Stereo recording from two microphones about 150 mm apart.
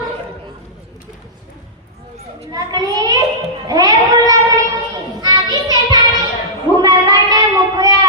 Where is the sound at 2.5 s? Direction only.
25° right (ahead or behind).